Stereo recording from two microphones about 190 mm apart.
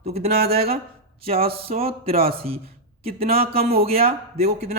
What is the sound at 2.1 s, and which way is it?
A man's voice, 50° right (ahead or behind).